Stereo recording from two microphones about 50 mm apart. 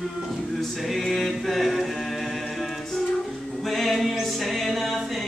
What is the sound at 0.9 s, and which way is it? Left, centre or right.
Music, centre.